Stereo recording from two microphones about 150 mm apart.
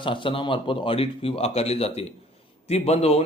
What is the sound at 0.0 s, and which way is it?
A man's voice, 35° left (ahead or behind).